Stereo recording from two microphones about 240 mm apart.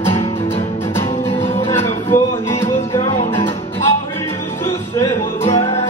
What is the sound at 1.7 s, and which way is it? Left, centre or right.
Music, centre.